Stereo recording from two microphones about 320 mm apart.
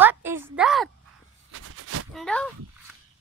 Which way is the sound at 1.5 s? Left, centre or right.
Right.